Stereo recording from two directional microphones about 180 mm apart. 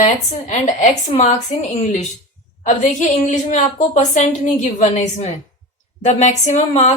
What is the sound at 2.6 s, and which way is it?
A woman's voice, 40° left (ahead or behind).